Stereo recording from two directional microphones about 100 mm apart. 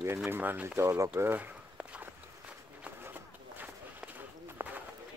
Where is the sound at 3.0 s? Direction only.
20° right (ahead or behind).